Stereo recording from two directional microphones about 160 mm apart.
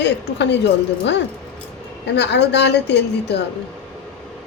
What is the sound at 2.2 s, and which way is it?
A woman's voice, 90° left.